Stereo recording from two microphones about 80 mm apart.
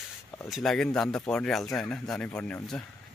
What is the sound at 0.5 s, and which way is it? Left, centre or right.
Speech, centre.